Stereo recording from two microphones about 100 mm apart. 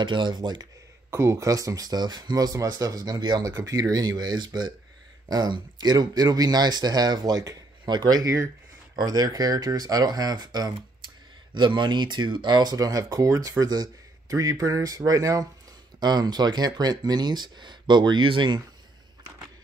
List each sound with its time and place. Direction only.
0.0 s speech: 50° right (ahead or behind)
1.1 s speech: 30° right (ahead or behind); by 18.6 s 55° right (ahead or behind)